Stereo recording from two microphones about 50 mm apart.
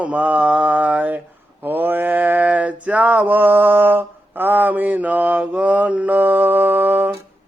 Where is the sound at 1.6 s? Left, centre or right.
Right.